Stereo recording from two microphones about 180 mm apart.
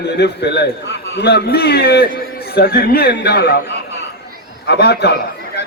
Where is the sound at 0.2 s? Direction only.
65° left (ahead or behind).